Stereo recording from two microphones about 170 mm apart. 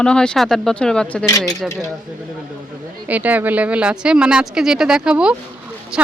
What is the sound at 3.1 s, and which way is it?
Speech, 10° right (ahead or behind).